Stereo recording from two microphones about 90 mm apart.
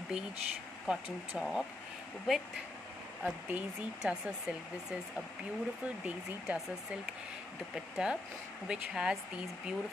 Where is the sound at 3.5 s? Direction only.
15° right (ahead or behind).